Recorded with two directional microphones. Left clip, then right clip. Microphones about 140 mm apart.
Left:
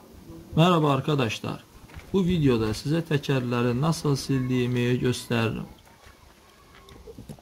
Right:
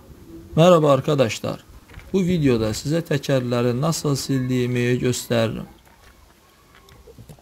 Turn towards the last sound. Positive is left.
turn(degrees=-35)  # may be behind; listen again after turning